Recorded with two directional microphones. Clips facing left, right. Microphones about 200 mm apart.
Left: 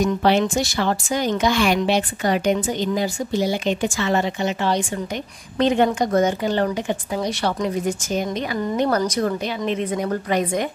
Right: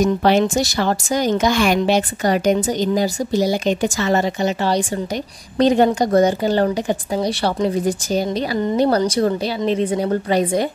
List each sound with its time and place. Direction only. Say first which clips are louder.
0.0 s a woman's voice: right 3 dB; 40° right (ahead or behind)